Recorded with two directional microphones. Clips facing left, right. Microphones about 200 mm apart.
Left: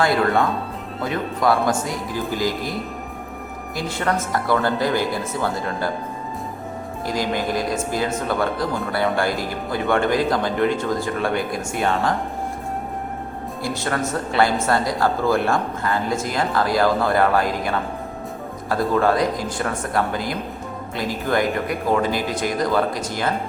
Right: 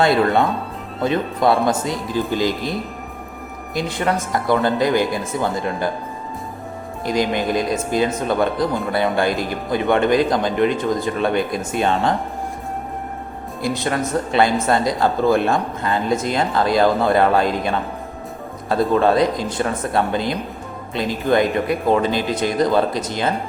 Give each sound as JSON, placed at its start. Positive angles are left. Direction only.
{"t": 1.0, "sound": "speech", "side_deg": -25}
{"t": 3.8, "sound": "speech", "side_deg": -15}
{"t": 7.0, "sound": "speech", "side_deg": -20}
{"t": 13.6, "sound": "speech", "side_deg": -15}